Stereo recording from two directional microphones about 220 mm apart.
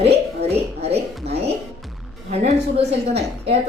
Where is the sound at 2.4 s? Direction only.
30° right (ahead or behind).